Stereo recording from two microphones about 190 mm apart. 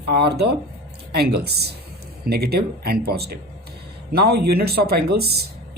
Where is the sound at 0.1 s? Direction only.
60° right (ahead or behind).